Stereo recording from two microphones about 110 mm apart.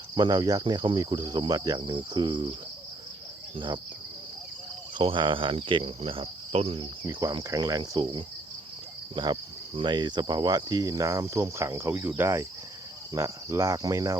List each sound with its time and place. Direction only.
0.2 s cricket: 40° right (ahead or behind)
4.9 s cricket: 45° right (ahead or behind)
7.1 s cricket: 40° right (ahead or behind)